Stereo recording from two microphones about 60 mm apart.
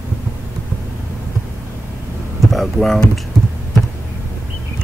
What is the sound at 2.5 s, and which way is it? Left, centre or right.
Speech, centre.